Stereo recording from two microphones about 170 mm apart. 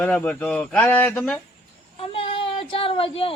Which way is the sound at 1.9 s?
30° left (ahead or behind).